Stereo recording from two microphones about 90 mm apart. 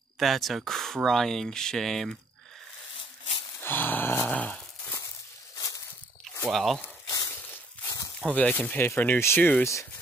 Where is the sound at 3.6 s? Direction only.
20° left (ahead or behind).